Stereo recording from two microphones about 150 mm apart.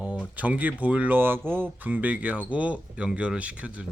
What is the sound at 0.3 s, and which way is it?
Speech, 10° right (ahead or behind).